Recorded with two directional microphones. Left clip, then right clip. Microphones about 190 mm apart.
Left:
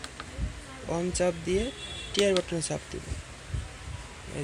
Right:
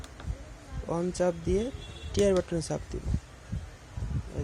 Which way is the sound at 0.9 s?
15° right (ahead or behind).